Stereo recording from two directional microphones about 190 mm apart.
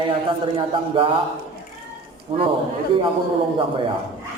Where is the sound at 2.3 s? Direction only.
30° right (ahead or behind).